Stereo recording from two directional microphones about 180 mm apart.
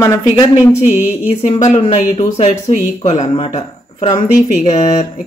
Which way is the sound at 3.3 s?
30° left (ahead or behind).